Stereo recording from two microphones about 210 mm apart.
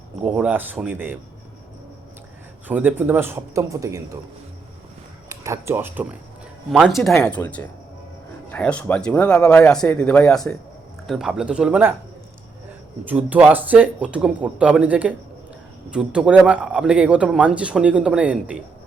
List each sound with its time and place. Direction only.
0.2 s speech: 5° right (ahead or behind)
2.6 s speech: 10° right (ahead or behind)
5.3 s speech: 15° right (ahead or behind)
7.1 s speech: 10° left (ahead or behind)
8.4 s speech: 5° left (ahead or behind)
13.1 s speech: 5° right (ahead or behind)